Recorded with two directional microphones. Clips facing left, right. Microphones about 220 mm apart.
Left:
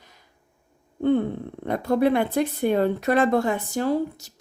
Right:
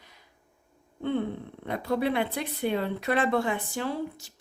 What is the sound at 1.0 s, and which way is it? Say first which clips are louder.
Speech: left 7 dB; 45° left (ahead or behind).